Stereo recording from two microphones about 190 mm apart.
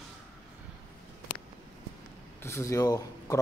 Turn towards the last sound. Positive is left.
turn(degrees=15)  # may be behind; listen again after turning